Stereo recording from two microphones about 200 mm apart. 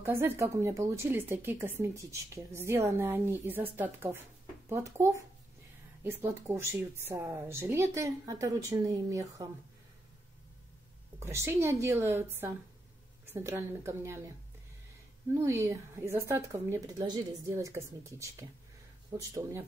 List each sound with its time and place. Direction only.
0.0 s a woman's voice: 15° right (ahead or behind)
11.1 s a woman's voice: 15° right (ahead or behind)
15.3 s a woman's voice: 15° right (ahead or behind)